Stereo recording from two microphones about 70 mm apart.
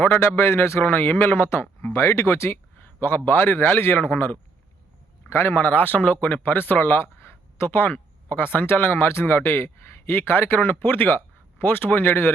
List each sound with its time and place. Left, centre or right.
0.0 s speech: left